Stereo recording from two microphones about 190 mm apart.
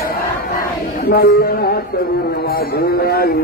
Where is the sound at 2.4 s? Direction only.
55° left (ahead or behind).